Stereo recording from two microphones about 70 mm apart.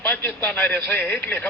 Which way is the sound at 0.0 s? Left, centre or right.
Left.